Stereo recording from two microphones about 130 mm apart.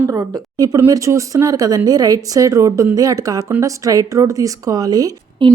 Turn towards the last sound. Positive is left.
turn(degrees=-30)  # may be behind; listen again after turning